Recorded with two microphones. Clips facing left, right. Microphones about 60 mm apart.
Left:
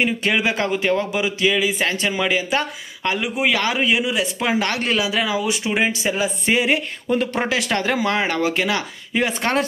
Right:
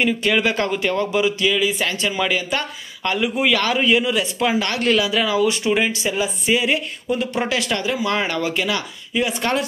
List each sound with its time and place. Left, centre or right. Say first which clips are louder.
0.0 s speech: right 1 dB; centre
6.4 s a sound: left 1 dB; left
7.3 s speech: left 1 dB; left
7.8 s speech: left 2 dB; left
8.1 s speech: left 1 dB; left